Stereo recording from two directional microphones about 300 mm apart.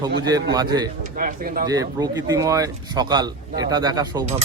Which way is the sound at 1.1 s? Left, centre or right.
Right.